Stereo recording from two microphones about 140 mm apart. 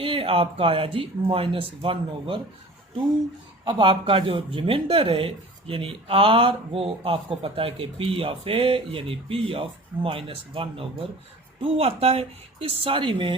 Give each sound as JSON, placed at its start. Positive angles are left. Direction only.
{"t": 0.0, "sound": "speech", "side_deg": -40}
{"t": 3.6, "sound": "speech", "side_deg": -35}